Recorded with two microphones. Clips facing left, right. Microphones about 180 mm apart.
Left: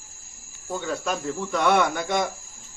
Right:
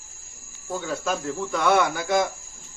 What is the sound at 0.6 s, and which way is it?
Speech, centre (ahead or behind).